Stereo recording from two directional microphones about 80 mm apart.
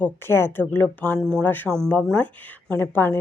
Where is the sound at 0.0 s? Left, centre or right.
Left; by 1.5 s centre.